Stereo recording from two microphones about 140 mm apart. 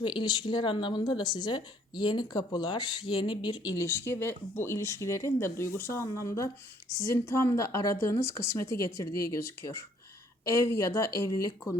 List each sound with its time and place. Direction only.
0.0 s speech: 35° left (ahead or behind)